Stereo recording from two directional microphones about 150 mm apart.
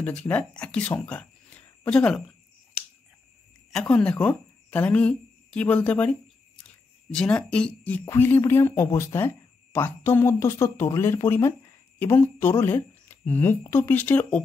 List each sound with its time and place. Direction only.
0.0 s speech: 10° left (ahead or behind)
3.7 s a woman's voice: 5° left (ahead or behind)